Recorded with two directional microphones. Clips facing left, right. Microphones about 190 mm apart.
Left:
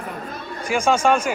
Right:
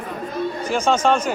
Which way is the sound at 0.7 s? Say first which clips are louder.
Left 1 dB; 10° left (ahead or behind).